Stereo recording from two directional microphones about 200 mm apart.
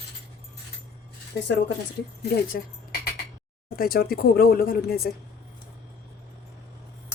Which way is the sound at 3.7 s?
50° left (ahead or behind).